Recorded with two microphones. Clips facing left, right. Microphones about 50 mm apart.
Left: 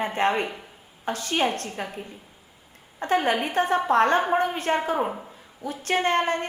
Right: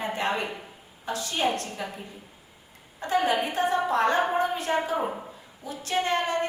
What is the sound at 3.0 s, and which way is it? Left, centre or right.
A woman's voice, left.